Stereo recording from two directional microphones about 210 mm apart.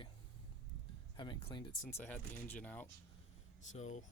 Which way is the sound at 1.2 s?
20° left (ahead or behind).